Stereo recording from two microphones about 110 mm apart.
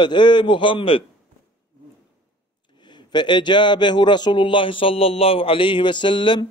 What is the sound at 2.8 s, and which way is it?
A man's voice, 45° left (ahead or behind).